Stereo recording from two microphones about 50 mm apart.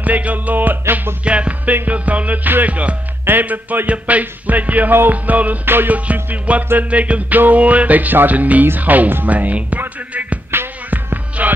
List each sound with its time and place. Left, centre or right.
0.0 s music: right
1.2 s music: right
3.3 s music: right
5.7 s music: right
6.3 s music: right
8.6 s speech: right
11.4 s music: right